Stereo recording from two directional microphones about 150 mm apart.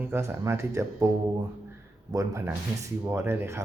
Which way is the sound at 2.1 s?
20° right (ahead or behind).